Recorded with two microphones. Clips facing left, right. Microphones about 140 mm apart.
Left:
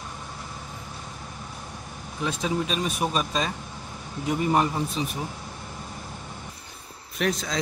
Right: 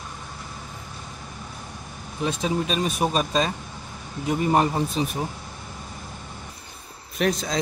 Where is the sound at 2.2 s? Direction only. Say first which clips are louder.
Right 2 dB; 25° right (ahead or behind).